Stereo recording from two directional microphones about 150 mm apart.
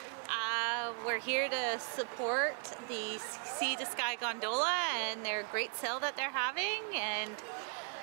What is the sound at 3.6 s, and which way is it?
A woman's voice, 10° right (ahead or behind).